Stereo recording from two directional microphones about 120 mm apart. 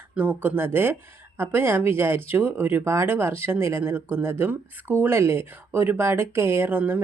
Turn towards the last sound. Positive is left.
turn(degrees=-15)  # may be behind; listen again after turning